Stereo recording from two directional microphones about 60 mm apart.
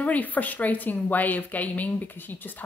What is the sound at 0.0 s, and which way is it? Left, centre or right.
Speech, left.